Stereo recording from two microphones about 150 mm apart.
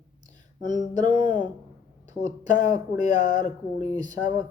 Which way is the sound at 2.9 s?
25° right (ahead or behind).